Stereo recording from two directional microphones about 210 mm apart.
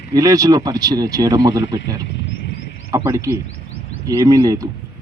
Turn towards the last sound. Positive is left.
turn(degrees=-15)  # may be behind; listen again after turning